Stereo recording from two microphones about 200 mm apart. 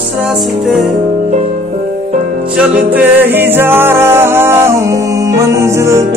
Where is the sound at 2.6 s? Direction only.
10° right (ahead or behind).